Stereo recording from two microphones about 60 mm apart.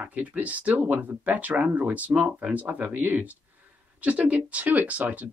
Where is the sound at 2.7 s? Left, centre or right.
Right.